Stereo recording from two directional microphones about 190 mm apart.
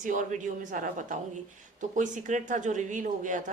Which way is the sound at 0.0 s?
45° right (ahead or behind).